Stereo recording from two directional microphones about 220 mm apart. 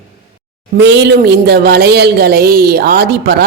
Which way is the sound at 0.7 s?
50° right (ahead or behind).